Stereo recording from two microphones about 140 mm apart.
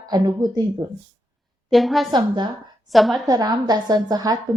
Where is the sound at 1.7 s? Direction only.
Centre (ahead or behind).